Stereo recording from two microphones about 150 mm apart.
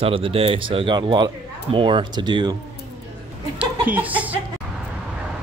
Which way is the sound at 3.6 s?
10° right (ahead or behind).